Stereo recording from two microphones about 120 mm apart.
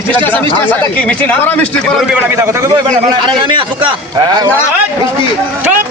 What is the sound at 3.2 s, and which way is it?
A man's voice, 45° right (ahead or behind).